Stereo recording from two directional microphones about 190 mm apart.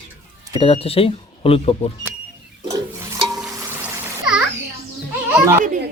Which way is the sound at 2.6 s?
20° right (ahead or behind).